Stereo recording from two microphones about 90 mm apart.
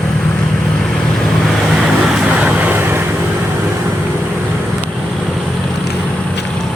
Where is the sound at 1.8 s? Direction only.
10° right (ahead or behind).